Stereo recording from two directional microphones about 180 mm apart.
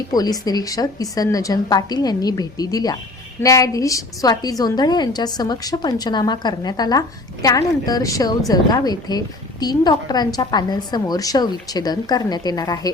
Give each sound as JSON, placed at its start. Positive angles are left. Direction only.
{"t": 0.1, "sound": "a woman's voice", "side_deg": 20}